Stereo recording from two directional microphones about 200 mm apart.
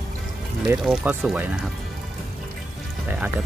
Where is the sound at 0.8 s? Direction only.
5° right (ahead or behind).